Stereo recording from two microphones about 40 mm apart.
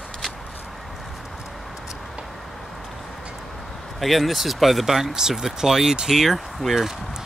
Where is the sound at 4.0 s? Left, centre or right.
Centre.